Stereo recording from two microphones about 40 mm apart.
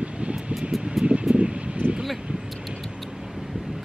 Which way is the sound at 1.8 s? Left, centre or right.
Right.